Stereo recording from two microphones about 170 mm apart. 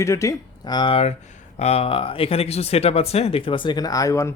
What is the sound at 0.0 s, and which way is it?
Speech, 20° left (ahead or behind).